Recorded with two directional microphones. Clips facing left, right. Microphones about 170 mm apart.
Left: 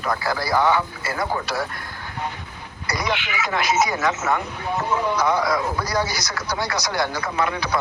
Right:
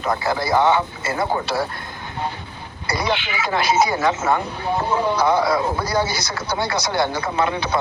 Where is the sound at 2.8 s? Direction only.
30° right (ahead or behind).